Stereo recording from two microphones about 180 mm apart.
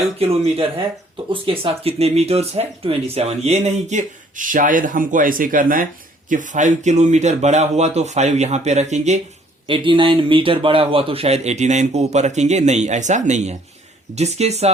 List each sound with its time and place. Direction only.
0.2 s speech: 35° right (ahead or behind)
9.6 s speech: 30° right (ahead or behind)